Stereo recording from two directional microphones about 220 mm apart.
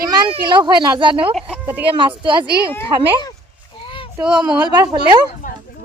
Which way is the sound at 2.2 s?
20° right (ahead or behind).